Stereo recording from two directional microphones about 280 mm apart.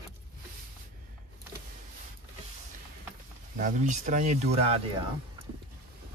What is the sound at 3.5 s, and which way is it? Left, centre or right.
Speech, right.